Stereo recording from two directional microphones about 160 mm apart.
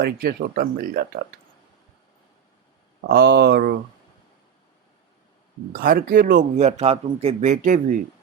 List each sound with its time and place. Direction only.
0.0 s speech: 75° right (ahead or behind)
3.2 s speech: 85° right
5.7 s a man's voice: 60° right (ahead or behind)